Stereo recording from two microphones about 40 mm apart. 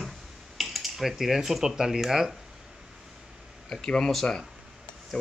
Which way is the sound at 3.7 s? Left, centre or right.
Centre.